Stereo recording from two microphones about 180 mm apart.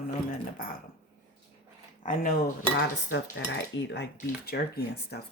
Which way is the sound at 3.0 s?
90° left.